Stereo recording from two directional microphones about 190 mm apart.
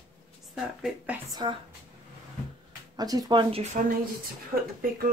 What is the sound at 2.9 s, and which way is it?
Speech, 20° right (ahead or behind).